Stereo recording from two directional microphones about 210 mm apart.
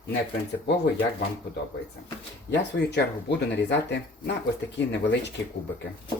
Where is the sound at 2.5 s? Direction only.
55° left (ahead or behind).